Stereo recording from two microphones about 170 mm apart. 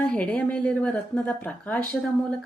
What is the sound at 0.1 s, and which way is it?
A woman's voice, 5° left (ahead or behind).